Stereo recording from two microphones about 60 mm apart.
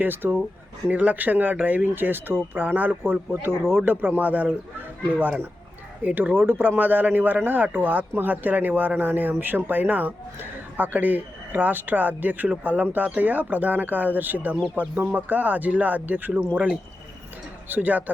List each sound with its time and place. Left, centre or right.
0.0 s speech: right
6.0 s speech: right
17.7 s speech: right